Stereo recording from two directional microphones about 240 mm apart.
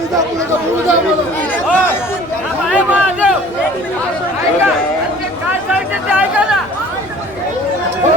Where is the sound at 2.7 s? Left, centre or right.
Centre.